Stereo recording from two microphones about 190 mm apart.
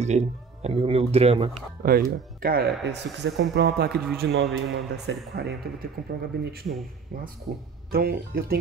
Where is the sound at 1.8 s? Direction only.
50° right (ahead or behind).